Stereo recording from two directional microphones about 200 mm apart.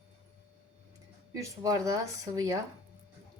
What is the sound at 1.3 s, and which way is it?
Speech, 15° right (ahead or behind).